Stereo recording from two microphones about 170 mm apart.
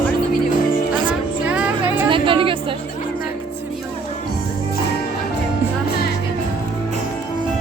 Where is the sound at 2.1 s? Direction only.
30° right (ahead or behind).